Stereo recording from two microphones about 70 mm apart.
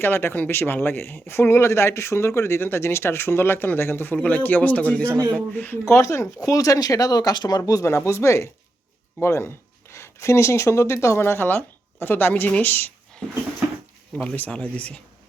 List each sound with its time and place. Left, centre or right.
0.0 s speech: left
5.5 s speech: left
5.8 s speech: left
6.4 s speech: left
7.6 s speech: left
13.2 s a sound: centre
14.2 s speech: left